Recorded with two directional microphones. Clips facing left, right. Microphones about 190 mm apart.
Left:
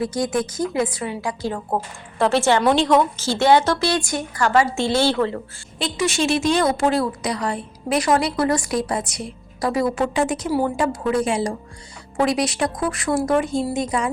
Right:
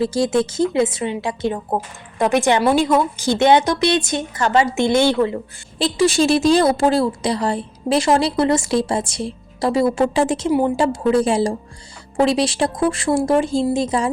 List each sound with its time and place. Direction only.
0.0 s a woman's voice: 30° right (ahead or behind)
5.8 s a woman's voice: 35° right (ahead or behind)